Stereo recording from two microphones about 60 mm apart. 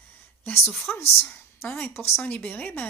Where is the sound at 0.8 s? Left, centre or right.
Left.